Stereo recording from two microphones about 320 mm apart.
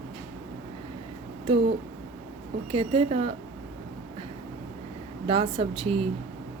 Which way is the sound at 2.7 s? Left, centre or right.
Centre.